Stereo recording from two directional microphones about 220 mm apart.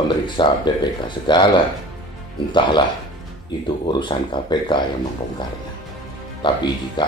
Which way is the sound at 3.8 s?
20° left (ahead or behind).